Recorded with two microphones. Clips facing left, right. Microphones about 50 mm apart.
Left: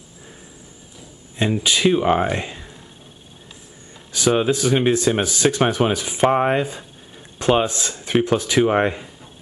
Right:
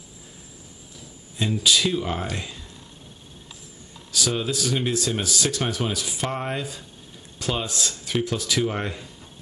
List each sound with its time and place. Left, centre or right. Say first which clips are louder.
1.4 s speech: left 4 dB; left
4.1 s speech: left 8 dB; left